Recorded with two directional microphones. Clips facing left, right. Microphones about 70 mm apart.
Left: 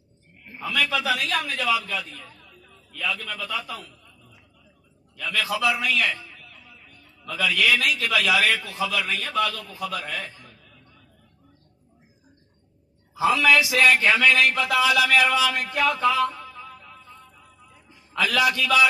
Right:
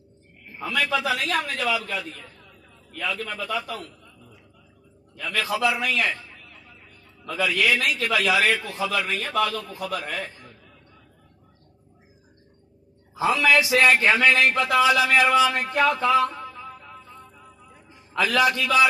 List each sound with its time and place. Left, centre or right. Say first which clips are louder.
0.7 s a man's voice: even; right
5.1 s a man's voice: even; right
13.2 s a man's voice: left 1 dB; right
16.6 s music: right 3 dB; right
18.1 s a man's voice: right 1 dB; right